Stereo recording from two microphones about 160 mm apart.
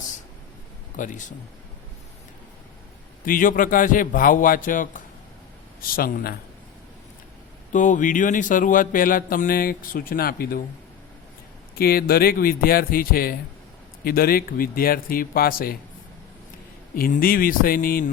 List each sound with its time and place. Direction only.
0.9 s speech: 55° left (ahead or behind)
3.2 s speech: 60° left (ahead or behind)
7.7 s speech: 55° left (ahead or behind); by 10.6 s 70° left (ahead or behind)
11.7 s speech: 70° left (ahead or behind)
16.9 s speech: 60° left (ahead or behind)